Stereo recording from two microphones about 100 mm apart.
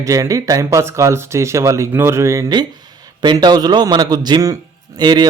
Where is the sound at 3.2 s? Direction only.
45° right (ahead or behind).